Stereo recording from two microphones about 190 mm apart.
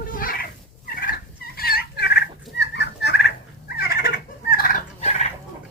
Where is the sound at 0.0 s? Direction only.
50° left (ahead or behind).